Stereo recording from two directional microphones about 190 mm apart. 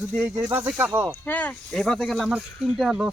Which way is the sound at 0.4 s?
10° right (ahead or behind).